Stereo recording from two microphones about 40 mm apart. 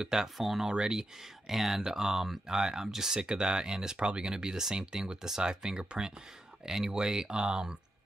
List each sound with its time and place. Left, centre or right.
0.0 s speech: centre
1.5 s speech: centre; by 6.1 s right
6.6 s speech: centre